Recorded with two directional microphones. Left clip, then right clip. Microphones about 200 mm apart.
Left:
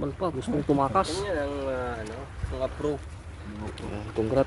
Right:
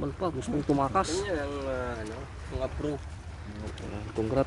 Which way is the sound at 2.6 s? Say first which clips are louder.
Left 4 dB; 5° left (ahead or behind).